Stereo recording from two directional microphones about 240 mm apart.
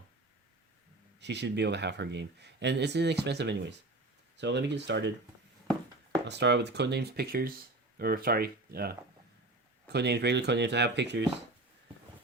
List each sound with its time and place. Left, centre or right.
1.2 s speech: right
6.2 s speech: right